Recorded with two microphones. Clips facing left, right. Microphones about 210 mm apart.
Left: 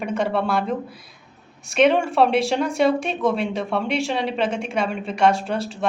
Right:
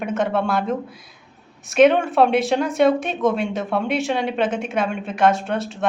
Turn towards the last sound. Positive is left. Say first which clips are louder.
# right 1 dB
turn(degrees=0)  # may be behind; listen again after turning